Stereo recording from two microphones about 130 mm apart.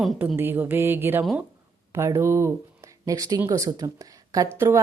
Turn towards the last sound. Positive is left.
turn(degrees=-20)  # may be behind; listen again after turning